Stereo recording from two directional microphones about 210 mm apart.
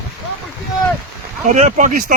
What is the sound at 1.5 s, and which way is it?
Speech, 35° right (ahead or behind).